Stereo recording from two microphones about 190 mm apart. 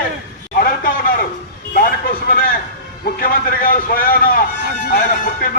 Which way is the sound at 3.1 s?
50° left (ahead or behind).